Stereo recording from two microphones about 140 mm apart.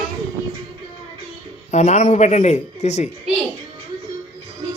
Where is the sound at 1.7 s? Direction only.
50° left (ahead or behind).